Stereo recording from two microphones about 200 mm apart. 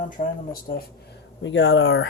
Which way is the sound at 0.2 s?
50° left (ahead or behind).